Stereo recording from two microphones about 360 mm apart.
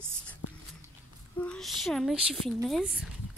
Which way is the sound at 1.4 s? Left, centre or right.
Centre.